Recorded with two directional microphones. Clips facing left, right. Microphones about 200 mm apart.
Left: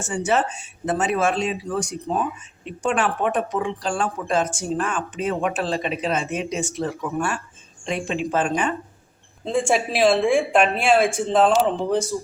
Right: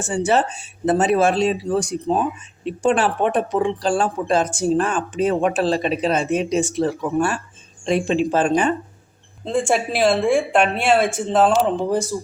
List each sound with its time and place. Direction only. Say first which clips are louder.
0.0 s speech: right 3 dB; 35° right (ahead or behind)
9.4 s speech: right 1 dB; centre (ahead or behind)